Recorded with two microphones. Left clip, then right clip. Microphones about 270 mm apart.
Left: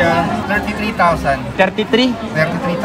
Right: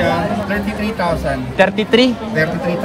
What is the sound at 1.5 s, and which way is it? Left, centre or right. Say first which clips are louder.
Speech: right 4 dB; right.